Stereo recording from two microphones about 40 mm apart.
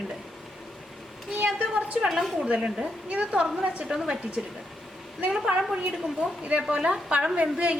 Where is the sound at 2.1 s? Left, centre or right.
Centre.